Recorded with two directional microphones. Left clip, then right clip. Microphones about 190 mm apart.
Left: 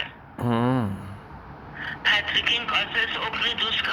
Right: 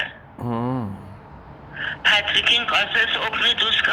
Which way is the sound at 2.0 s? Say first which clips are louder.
Right 4 dB; 55° right (ahead or behind).